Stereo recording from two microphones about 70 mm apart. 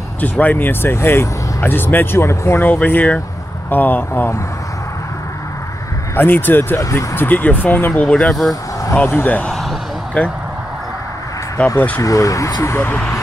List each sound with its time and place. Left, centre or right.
0.2 s speech: left
2.7 s speech: left
6.1 s speech: left
6.8 s speech: left
7.2 s speech: left
8.3 s speech: centre
8.9 s speech: left
9.5 s a sound: centre
10.2 s speech: centre
12.0 s speech: left
12.6 s speech: left